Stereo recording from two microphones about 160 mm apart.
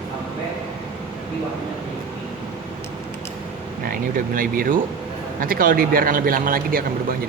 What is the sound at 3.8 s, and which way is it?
A man's voice, 60° right (ahead or behind).